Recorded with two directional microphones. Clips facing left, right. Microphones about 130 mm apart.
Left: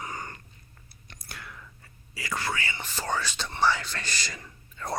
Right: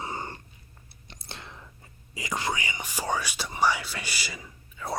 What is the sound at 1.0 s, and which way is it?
Whispering, 25° right (ahead or behind).